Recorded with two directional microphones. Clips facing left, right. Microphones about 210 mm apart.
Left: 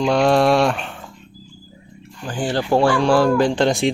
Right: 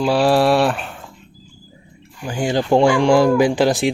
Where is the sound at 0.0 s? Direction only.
5° right (ahead or behind).